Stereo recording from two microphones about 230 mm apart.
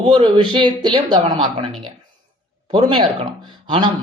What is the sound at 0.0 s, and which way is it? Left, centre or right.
Speech, right.